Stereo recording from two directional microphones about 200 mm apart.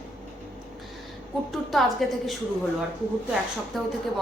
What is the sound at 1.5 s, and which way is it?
Speech, centre (ahead or behind).